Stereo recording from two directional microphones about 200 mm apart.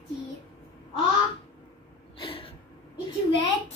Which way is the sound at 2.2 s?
30° left (ahead or behind).